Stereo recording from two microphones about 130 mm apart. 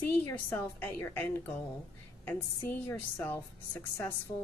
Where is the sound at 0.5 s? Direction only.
15° left (ahead or behind).